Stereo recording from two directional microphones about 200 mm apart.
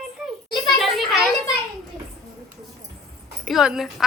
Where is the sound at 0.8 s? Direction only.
Centre (ahead or behind).